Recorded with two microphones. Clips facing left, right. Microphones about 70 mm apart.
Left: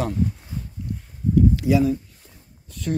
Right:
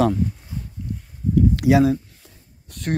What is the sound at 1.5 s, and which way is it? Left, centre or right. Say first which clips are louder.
Speech: right 3 dB; right.